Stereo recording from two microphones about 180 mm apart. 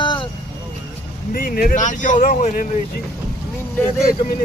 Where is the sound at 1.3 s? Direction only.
50° left (ahead or behind).